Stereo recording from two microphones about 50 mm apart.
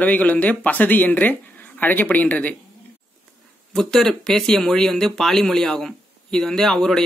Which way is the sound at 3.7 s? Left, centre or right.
Centre.